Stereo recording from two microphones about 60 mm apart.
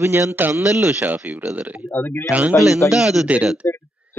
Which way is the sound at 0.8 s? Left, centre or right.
Right.